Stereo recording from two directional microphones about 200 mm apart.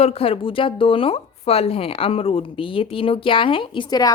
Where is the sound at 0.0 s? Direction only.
30° left (ahead or behind).